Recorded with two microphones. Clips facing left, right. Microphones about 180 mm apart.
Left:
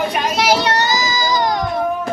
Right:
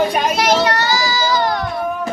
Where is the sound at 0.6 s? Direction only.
20° left (ahead or behind).